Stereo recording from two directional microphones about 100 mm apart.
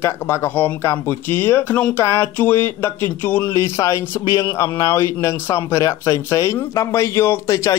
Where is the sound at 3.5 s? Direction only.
30° left (ahead or behind).